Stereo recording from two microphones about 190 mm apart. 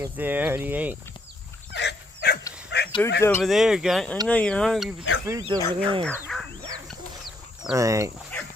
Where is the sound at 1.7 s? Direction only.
60° left (ahead or behind).